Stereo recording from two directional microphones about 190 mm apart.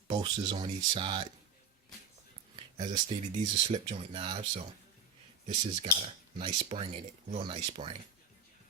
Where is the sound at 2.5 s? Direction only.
30° right (ahead or behind).